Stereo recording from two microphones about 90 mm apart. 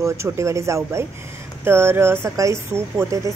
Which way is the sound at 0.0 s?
35° right (ahead or behind).